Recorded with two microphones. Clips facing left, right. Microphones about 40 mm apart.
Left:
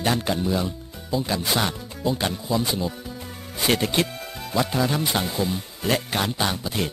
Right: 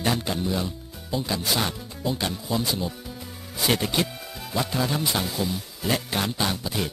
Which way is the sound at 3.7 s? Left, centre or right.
Centre.